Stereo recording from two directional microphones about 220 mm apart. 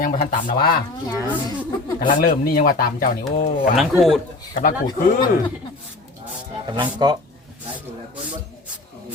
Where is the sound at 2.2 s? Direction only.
40° left (ahead or behind).